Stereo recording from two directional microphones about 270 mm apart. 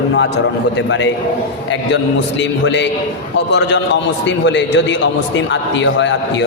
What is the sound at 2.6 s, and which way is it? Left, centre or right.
A man's voice, left.